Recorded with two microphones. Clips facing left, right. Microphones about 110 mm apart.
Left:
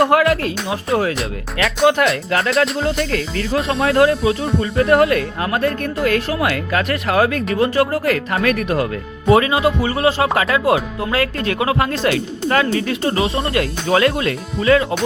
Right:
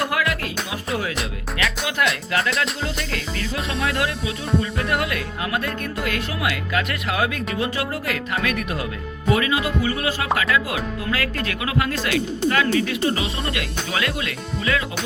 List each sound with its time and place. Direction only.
0.0 s speech: 35° left (ahead or behind)
1.9 s speech: 45° left (ahead or behind)
9.3 s speech: 30° left (ahead or behind)